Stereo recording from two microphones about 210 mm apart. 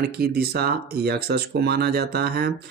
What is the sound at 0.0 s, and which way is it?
Speech, 50° right (ahead or behind).